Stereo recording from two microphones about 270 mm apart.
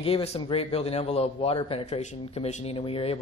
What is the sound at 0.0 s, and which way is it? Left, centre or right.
A man's voice, left.